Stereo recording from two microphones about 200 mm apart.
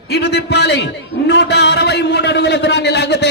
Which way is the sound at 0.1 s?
55° left (ahead or behind).